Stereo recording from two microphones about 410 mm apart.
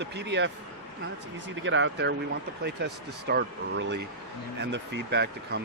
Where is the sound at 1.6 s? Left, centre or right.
Right.